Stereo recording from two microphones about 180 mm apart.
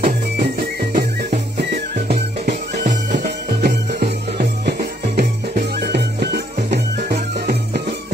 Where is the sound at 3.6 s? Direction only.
60° right (ahead or behind).